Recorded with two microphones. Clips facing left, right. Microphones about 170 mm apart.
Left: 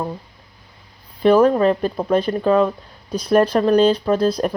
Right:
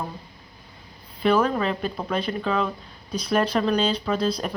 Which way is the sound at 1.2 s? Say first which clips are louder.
Left 8 dB; 45° left (ahead or behind).